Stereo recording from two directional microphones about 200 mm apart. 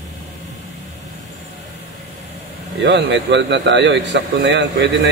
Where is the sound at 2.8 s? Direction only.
60° right (ahead or behind).